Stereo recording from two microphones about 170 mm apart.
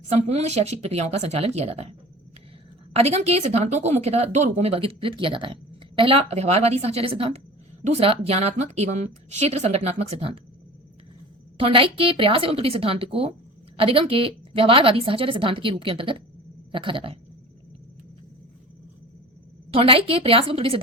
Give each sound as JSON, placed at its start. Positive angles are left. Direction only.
{"t": 0.1, "sound": "a woman's voice", "side_deg": -40}
{"t": 2.9, "sound": "a woman's voice", "side_deg": -40}
{"t": 11.5, "sound": "a woman's voice", "side_deg": -30}
{"t": 19.7, "sound": "a woman's voice", "side_deg": -35}